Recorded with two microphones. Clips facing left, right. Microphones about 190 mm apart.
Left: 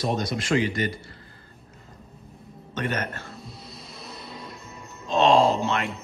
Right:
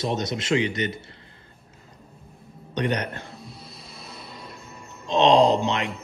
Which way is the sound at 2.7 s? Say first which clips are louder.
Right 3 dB; 15° right (ahead or behind).